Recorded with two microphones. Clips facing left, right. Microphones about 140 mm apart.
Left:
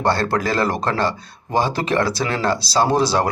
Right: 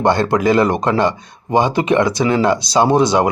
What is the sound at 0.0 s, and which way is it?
Speech, 20° right (ahead or behind).